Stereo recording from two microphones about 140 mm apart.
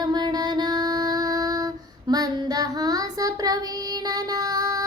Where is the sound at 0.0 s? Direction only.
30° right (ahead or behind).